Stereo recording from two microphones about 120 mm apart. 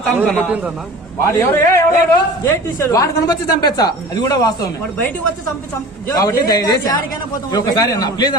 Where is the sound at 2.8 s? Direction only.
25° left (ahead or behind).